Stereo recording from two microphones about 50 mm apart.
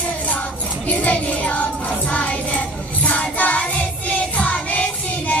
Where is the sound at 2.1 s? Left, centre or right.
Left.